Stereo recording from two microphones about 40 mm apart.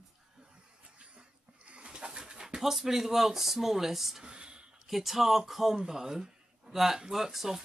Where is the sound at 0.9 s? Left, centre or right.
Right.